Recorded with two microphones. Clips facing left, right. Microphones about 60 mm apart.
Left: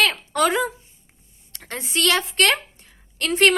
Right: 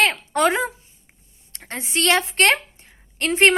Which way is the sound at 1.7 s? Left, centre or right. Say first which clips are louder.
Right 1 dB; right.